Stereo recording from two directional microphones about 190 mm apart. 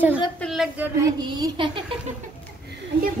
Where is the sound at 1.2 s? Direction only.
20° right (ahead or behind).